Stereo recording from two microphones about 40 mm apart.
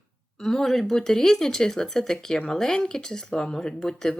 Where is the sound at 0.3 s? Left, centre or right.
Centre.